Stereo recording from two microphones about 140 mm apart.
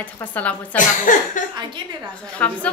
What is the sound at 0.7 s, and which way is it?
Speech, 70° left (ahead or behind).